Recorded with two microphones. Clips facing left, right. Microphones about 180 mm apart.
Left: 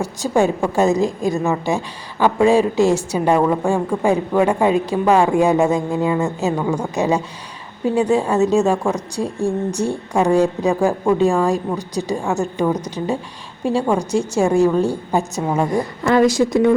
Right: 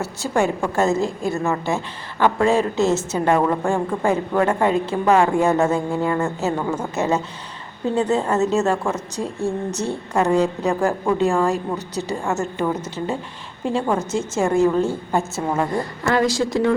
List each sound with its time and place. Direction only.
0.0 s a woman's voice: 15° left (ahead or behind)